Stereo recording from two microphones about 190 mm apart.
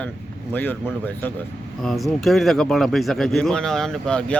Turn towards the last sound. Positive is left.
turn(degrees=5)  # may be behind; listen again after turning